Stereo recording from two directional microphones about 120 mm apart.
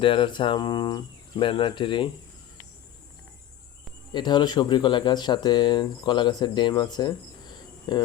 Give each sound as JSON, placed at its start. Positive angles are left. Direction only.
{"t": 0.0, "sound": "speech", "side_deg": 45}
{"t": 4.1, "sound": "speech", "side_deg": 40}